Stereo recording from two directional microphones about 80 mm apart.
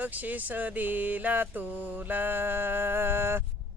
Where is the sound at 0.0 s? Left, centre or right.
Right.